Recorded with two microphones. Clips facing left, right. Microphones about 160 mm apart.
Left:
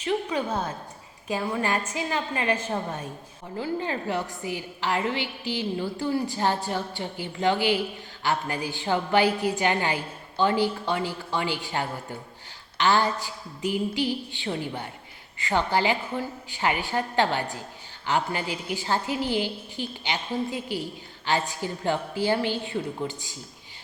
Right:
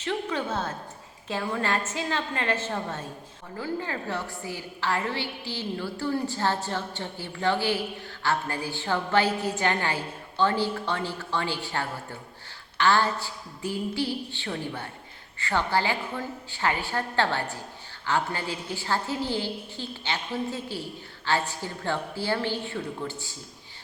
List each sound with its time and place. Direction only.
0.0 s a woman's voice: 15° left (ahead or behind)